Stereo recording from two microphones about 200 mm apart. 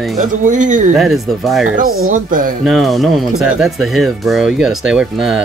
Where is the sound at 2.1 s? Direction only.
45° right (ahead or behind).